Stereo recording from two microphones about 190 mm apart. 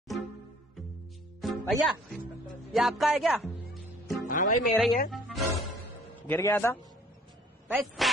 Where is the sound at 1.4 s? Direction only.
Centre (ahead or behind).